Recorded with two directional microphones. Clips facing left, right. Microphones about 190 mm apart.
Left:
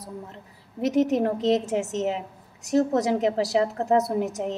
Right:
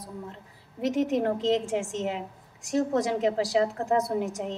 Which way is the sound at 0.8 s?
40° left (ahead or behind).